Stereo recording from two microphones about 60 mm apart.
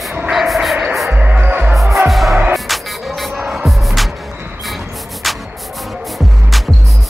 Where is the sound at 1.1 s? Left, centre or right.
Right.